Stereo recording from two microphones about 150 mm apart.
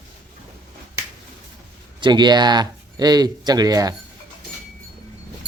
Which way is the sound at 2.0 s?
30° right (ahead or behind).